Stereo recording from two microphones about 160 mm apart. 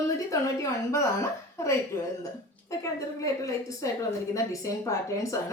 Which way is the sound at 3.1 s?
20° left (ahead or behind).